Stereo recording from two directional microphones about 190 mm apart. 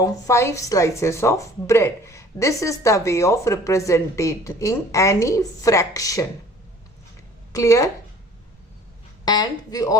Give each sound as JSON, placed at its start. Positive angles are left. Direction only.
{"t": 0.0, "sound": "speech", "side_deg": 15}
{"t": 7.5, "sound": "speech", "side_deg": 15}
{"t": 9.2, "sound": "speech", "side_deg": 20}